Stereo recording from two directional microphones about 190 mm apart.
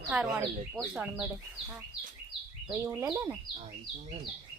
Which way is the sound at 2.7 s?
10° right (ahead or behind).